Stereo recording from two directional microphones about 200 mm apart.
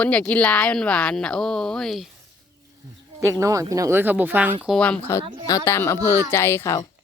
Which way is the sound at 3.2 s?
15° right (ahead or behind).